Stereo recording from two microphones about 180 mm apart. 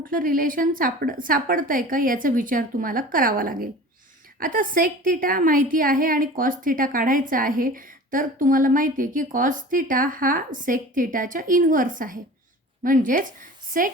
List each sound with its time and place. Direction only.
0.0 s a woman's voice: 50° right (ahead or behind)